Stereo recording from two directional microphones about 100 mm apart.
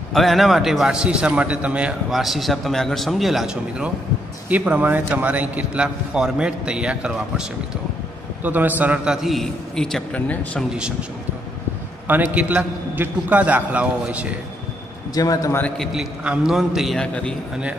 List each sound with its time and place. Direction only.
0.1 s a man's voice: centre (ahead or behind)
4.5 s a man's voice: 15° right (ahead or behind)
8.5 s a man's voice: 20° right (ahead or behind); by 10.6 s 15° left (ahead or behind)
10.7 s a man's voice: 10° right (ahead or behind)
12.1 s a man's voice: 20° right (ahead or behind)
15.1 s a man's voice: 35° left (ahead or behind)
15.8 s a man's voice: 5° right (ahead or behind)
17.0 s a man's voice: 10° left (ahead or behind)